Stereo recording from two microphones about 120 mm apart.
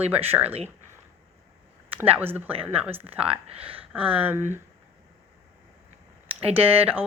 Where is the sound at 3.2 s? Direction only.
55° right (ahead or behind).